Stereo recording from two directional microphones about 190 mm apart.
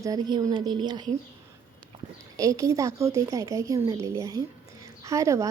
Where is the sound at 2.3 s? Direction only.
15° right (ahead or behind).